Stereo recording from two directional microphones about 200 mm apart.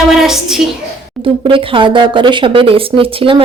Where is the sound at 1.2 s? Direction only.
25° right (ahead or behind).